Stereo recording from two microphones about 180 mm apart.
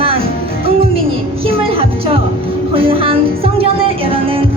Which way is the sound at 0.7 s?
30° right (ahead or behind).